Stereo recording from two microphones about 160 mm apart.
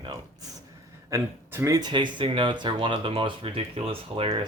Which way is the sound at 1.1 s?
15° right (ahead or behind).